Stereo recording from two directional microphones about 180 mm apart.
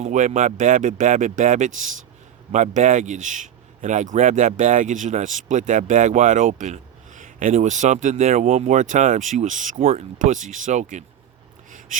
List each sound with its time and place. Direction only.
0.0 s a man's voice: 40° right (ahead or behind)